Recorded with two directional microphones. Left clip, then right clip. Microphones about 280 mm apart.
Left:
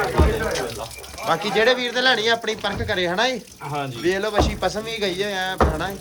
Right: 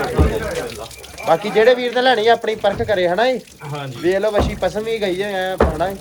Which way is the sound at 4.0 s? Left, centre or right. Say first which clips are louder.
Right 5 dB; centre.